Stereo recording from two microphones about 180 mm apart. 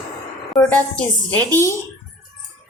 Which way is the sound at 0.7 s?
10° left (ahead or behind).